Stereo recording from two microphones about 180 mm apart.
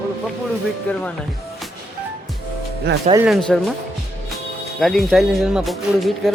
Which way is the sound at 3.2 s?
Centre (ahead or behind).